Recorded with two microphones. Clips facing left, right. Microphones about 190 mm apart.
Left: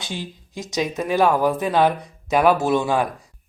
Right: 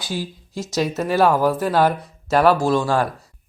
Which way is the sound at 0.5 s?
15° left (ahead or behind).